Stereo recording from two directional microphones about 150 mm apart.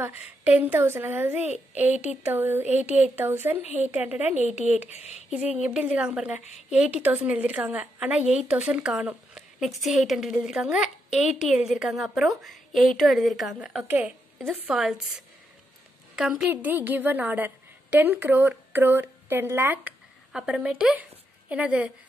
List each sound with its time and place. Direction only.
0.4 s speech: 10° right (ahead or behind)
4.8 s speech: 50° left (ahead or behind)
5.3 s speech: 10° right (ahead or behind)